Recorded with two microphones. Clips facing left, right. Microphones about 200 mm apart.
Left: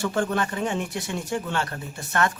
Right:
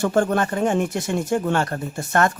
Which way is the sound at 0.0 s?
50° right (ahead or behind).